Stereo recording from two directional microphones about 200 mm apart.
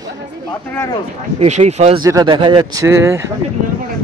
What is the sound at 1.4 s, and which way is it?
Speech, 35° right (ahead or behind).